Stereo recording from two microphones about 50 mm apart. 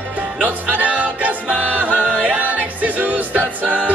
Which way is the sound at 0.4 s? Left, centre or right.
Right.